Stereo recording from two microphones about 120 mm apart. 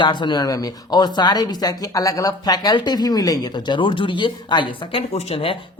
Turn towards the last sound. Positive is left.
turn(degrees=55)  # may be behind; listen again after turning